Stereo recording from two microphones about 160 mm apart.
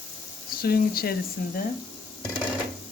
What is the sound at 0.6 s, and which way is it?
Speech, 70° left (ahead or behind).